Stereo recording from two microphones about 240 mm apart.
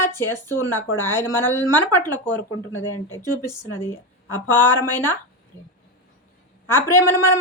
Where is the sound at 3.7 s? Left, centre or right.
Centre.